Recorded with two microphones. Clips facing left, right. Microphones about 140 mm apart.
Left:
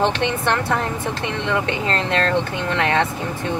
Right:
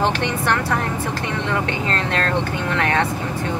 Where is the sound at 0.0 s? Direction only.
20° left (ahead or behind).